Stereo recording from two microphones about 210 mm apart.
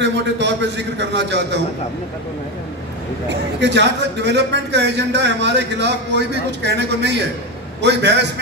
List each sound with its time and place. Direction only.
0.0 s a man's voice: 55° right (ahead or behind)
3.3 s a man's voice: 55° right (ahead or behind)